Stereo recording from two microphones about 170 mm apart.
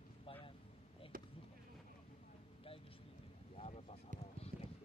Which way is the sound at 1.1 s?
55° right (ahead or behind).